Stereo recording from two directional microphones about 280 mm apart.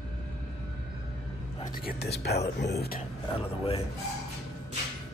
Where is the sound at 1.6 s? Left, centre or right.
Left.